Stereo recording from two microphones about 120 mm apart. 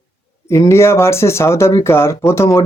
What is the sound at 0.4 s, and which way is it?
Speech, 25° left (ahead or behind).